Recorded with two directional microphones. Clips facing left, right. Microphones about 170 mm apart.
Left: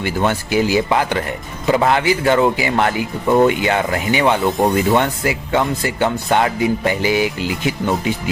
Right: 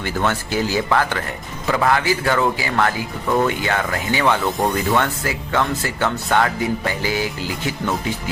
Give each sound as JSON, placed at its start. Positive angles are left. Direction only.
{"t": 0.0, "sound": "speech", "side_deg": 15}